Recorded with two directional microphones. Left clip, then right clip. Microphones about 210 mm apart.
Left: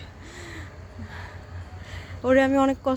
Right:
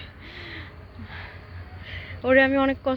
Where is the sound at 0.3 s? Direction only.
20° left (ahead or behind).